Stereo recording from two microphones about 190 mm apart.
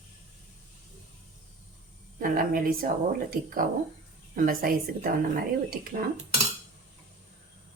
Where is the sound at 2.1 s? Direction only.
50° right (ahead or behind).